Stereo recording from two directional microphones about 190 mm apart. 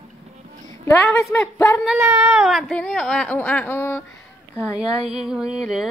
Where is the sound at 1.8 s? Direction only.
5° right (ahead or behind); by 4.0 s 10° left (ahead or behind).